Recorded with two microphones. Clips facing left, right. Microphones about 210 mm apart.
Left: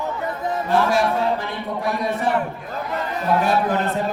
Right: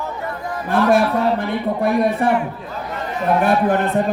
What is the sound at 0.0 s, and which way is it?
Music, 20° left (ahead or behind).